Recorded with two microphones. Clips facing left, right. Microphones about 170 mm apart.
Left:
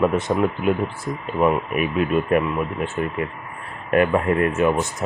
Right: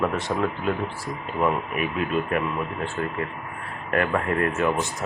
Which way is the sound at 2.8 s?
20° left (ahead or behind).